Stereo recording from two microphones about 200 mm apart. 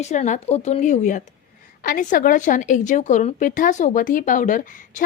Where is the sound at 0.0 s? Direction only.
35° left (ahead or behind).